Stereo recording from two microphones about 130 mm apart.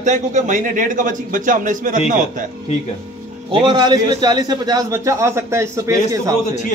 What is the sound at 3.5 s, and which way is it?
A man's voice, 40° right (ahead or behind).